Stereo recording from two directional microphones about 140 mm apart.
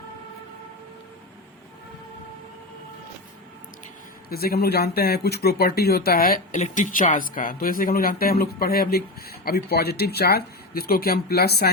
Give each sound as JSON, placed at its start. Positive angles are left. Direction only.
{"t": 4.3, "sound": "speech", "side_deg": 90}